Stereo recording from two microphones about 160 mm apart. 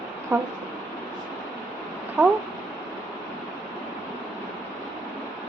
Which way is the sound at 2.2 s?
10° right (ahead or behind).